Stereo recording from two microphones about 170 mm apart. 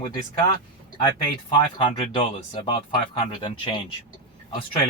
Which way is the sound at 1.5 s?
30° left (ahead or behind).